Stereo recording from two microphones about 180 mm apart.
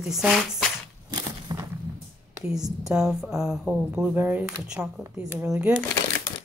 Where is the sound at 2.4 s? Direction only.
5° right (ahead or behind).